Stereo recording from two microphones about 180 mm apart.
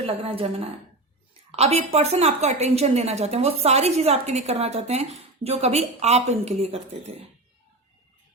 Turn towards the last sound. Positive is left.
turn(degrees=-35)  # may be behind; listen again after turning